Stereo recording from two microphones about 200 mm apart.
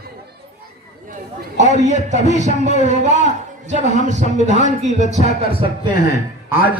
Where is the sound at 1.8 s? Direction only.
35° right (ahead or behind).